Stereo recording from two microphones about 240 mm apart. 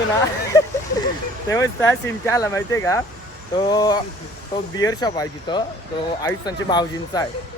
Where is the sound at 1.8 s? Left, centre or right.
Centre.